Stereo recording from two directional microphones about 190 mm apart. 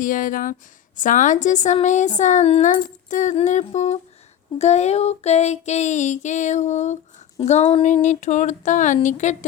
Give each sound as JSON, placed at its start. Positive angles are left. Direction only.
{"t": 0.0, "sound": "a woman's voice", "side_deg": 45}